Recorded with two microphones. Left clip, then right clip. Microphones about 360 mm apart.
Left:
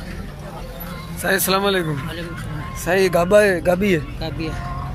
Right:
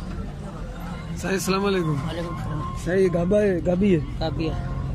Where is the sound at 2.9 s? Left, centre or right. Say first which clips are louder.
Left 6 dB; left.